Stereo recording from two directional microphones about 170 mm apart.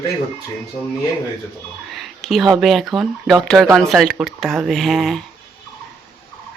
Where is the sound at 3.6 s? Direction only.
20° right (ahead or behind).